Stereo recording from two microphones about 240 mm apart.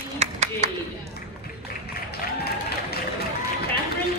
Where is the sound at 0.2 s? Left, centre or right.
Right.